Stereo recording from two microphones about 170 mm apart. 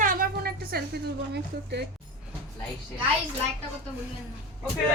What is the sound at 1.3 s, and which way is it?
Speech, 75° right (ahead or behind).